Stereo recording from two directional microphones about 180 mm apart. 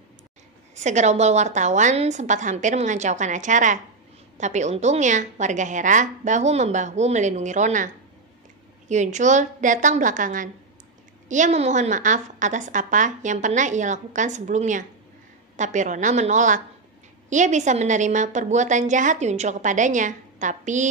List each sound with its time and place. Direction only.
0.7 s a woman's voice: 40° right (ahead or behind)